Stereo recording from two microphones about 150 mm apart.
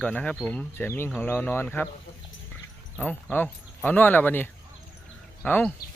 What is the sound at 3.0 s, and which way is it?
Speech, 10° left (ahead or behind).